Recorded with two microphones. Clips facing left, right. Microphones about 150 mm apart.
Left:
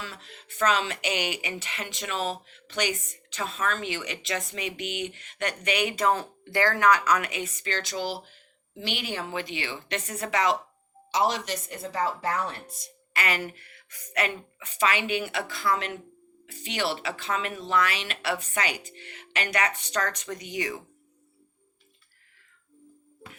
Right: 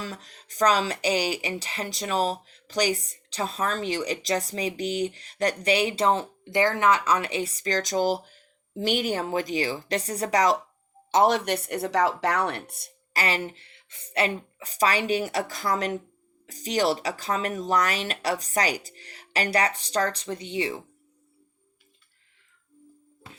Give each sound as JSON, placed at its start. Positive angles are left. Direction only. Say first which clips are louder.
{"t": 0.0, "sound": "speech", "louder": "right 4 dB", "side_deg": -40}
{"t": 11.1, "sound": "speech", "louder": "right 5 dB", "side_deg": -55}
{"t": 13.1, "sound": "speech", "louder": "right 2 dB", "side_deg": -30}